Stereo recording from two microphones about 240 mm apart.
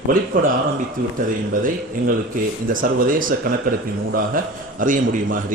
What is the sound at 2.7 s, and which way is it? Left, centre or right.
A man's voice, right.